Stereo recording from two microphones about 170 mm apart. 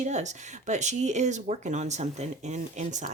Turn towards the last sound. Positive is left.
turn(degrees=-45)  # may be behind; listen again after turning